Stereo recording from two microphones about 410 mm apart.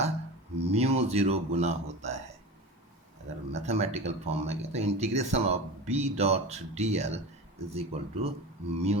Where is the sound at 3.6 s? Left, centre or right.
Centre.